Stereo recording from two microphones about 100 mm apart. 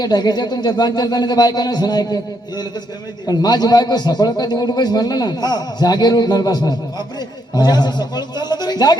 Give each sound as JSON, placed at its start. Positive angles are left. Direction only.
{"t": 0.0, "sound": "a man's voice", "side_deg": 40}